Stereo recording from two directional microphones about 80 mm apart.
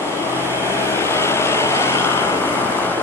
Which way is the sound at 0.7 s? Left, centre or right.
Left.